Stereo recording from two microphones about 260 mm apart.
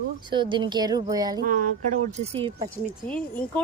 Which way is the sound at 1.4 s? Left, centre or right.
Right.